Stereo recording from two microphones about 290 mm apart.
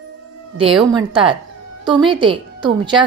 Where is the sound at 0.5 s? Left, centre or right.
Centre.